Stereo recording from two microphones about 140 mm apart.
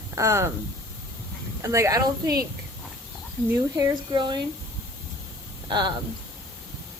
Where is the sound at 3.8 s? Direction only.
30° right (ahead or behind).